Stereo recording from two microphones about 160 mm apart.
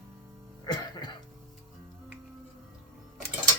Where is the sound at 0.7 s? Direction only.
30° left (ahead or behind).